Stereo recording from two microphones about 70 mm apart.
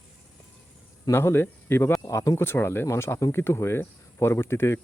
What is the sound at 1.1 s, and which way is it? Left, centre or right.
Speech, left.